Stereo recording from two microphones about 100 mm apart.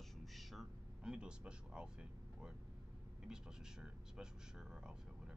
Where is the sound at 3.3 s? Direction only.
5° right (ahead or behind).